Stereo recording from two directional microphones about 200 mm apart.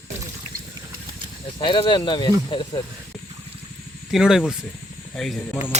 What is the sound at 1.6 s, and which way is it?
Speech, 25° left (ahead or behind).